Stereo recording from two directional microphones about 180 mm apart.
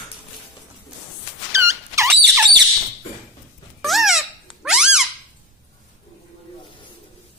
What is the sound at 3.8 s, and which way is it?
Squeak, centre (ahead or behind).